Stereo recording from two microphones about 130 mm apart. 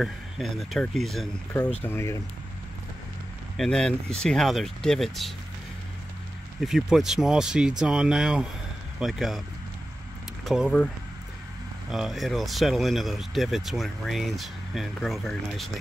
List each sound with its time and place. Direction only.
0.0 s speech: centre (ahead or behind)
1.8 s speech: 20° left (ahead or behind)
3.5 s speech: 5° left (ahead or behind)
6.6 s speech: 5° right (ahead or behind)
10.4 s speech: 5° right (ahead or behind)
11.9 s speech: centre (ahead or behind)